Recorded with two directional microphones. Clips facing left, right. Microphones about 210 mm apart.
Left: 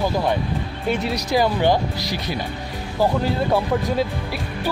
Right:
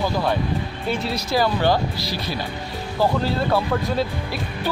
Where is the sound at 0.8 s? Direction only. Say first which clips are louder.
Left 3 dB; 15° left (ahead or behind).